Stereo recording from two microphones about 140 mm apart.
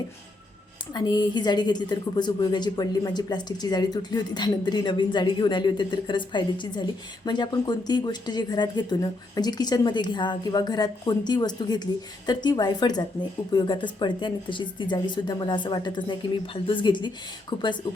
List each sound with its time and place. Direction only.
0.9 s a woman's voice: 30° left (ahead or behind)